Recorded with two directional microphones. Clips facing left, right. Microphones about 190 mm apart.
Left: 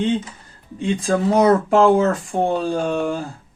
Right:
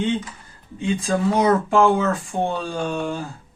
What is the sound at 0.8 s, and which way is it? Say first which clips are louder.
Speech: left 2 dB; 40° left (ahead or behind).